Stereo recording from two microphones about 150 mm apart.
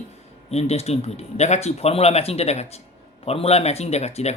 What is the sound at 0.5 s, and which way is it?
Speech, 45° left (ahead or behind).